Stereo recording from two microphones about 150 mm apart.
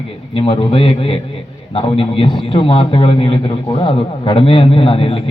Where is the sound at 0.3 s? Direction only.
35° left (ahead or behind).